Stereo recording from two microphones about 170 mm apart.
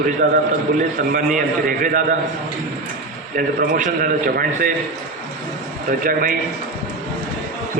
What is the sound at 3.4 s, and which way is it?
A man's voice, 55° right (ahead or behind).